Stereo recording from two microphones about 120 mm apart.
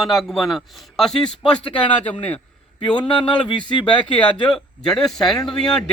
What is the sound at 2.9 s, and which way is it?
Speech, 40° left (ahead or behind).